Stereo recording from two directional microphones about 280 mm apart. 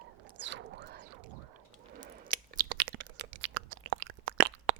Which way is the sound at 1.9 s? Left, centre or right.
Right.